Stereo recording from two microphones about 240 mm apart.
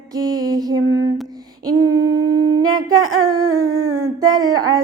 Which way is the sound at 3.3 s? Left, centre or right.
Right.